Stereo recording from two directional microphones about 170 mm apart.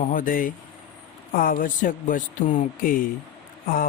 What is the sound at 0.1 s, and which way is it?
Speech, 55° left (ahead or behind).